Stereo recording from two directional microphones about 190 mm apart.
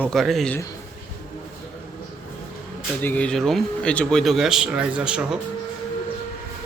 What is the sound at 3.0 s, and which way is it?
Speech, 10° left (ahead or behind).